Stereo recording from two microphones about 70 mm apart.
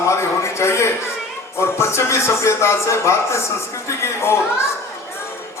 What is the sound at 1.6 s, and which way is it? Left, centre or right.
A man's voice, left.